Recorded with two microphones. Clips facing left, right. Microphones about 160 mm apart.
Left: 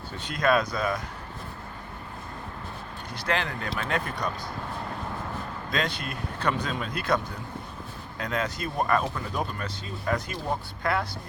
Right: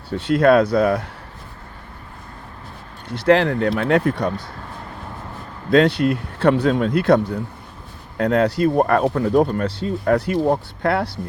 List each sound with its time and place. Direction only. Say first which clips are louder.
0.1 s speech: right 10 dB; 75° right (ahead or behind)
3.2 s speech: right 14 dB; 65° right (ahead or behind)
5.7 s speech: right 16 dB; 70° right (ahead or behind)